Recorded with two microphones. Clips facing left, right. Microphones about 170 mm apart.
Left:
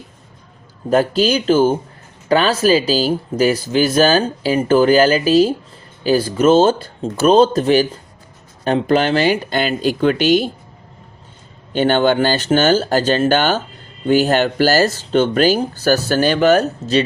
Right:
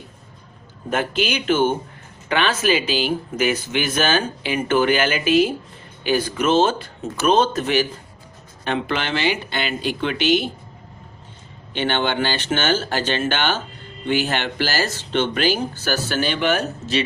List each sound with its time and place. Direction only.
0.9 s speech: 35° left (ahead or behind)
11.7 s speech: 40° left (ahead or behind)